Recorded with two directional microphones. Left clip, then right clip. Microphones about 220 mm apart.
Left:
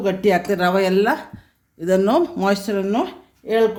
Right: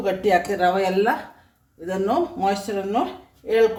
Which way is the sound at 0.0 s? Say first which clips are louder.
Left 1 dB; 55° left (ahead or behind).